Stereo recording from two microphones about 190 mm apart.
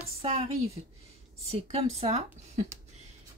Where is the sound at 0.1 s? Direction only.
30° right (ahead or behind).